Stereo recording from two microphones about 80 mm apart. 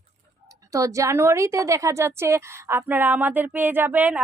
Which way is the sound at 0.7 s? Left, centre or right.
Right.